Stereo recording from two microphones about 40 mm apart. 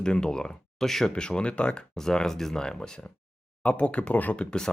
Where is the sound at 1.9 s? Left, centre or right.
Centre.